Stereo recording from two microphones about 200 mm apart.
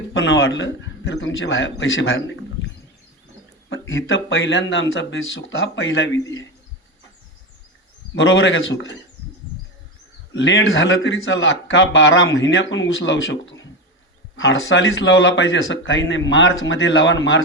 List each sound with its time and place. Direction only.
0.1 s a man's voice: 70° left (ahead or behind)
3.7 s a man's voice: 75° left (ahead or behind)
6.1 s a man's voice: 15° left (ahead or behind)
8.2 s a man's voice: 75° left (ahead or behind)
10.3 s a man's voice: 65° left (ahead or behind)